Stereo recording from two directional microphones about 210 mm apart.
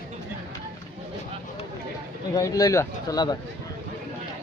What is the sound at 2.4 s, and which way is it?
Speech, 15° left (ahead or behind).